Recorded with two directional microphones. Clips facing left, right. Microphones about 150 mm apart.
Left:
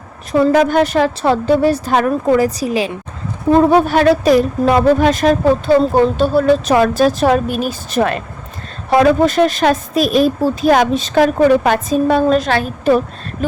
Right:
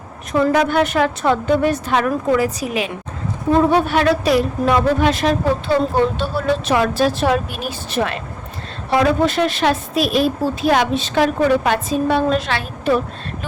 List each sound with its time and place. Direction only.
0.3 s a woman's voice: 40° left (ahead or behind)